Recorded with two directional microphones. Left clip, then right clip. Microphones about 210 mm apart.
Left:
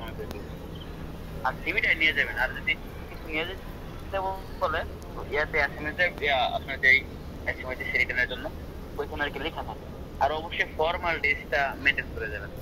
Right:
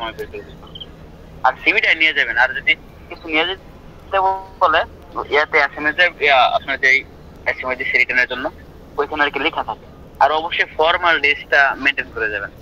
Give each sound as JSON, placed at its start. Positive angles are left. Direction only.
{"t": 1.4, "sound": "a man's voice", "side_deg": -40}